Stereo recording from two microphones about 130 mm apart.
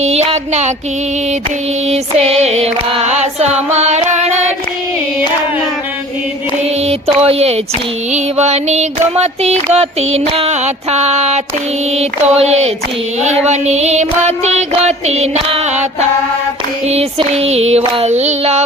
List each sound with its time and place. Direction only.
0.0 s music: 55° right (ahead or behind)
1.9 s music: 55° right (ahead or behind)
6.8 s speech: 50° right (ahead or behind)
8.1 s music: 60° right (ahead or behind)